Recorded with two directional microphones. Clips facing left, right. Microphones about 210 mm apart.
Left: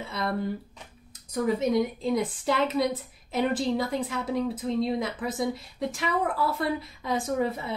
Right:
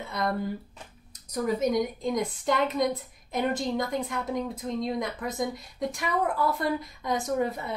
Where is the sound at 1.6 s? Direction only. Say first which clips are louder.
Left 1 dB; 5° left (ahead or behind).